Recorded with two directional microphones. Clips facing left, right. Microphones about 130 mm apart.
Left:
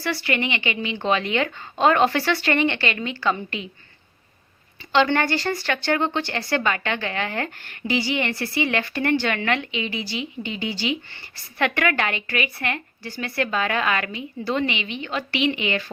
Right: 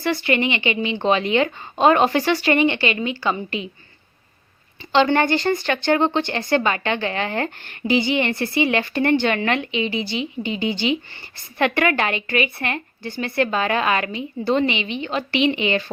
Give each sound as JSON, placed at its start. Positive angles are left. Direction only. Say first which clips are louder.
{"t": 0.0, "sound": "speech", "louder": "right 4 dB", "side_deg": -20}
{"t": 4.9, "sound": "speech", "louder": "right 3 dB", "side_deg": -20}